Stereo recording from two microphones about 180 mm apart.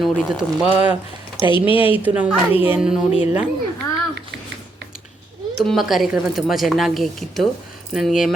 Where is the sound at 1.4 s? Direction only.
30° left (ahead or behind).